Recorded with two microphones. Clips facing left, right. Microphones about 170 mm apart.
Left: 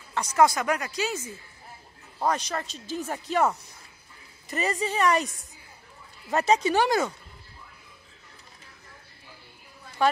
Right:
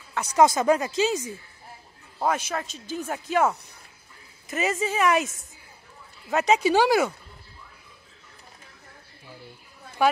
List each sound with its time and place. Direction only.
0.1 s a sound: 10° right (ahead or behind)
0.4 s speech: 25° right (ahead or behind)
2.1 s speech: 5° right (ahead or behind)